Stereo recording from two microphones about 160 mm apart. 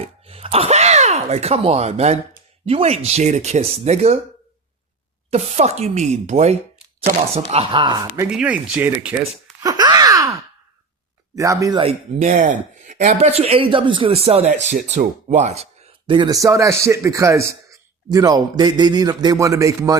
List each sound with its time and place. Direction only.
0.0 s a sound: 40° right (ahead or behind)
2.6 s speech: 40° right (ahead or behind)
5.3 s a man's voice: 45° right (ahead or behind); by 8.0 s 30° right (ahead or behind)
8.3 s speech: 5° right (ahead or behind)
9.6 s groan: 25° right (ahead or behind)
11.3 s a man's voice: 20° right (ahead or behind)
11.8 s speech: 45° right (ahead or behind)
16.1 s a man's voice: 25° right (ahead or behind)